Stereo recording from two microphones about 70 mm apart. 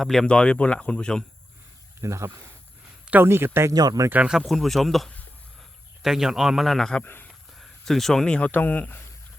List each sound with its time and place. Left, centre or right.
0.0 s speech: centre
0.3 s speech: centre
2.0 s speech: right
3.1 s speech: right
3.7 s speech: right
4.3 s speech: centre
7.0 s speech: left
7.3 s speech: centre; by 9.0 s left